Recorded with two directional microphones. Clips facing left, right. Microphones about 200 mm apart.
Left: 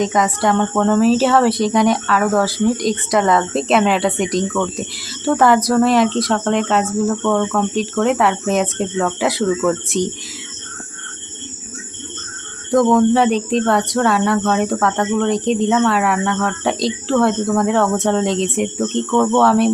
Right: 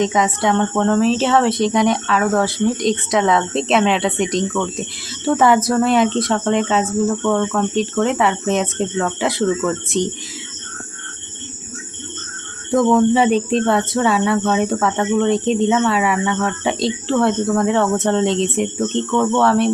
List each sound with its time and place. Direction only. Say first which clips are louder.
0.0 s speech: even; centre (ahead or behind)
12.7 s speech: left 1 dB; 5° right (ahead or behind)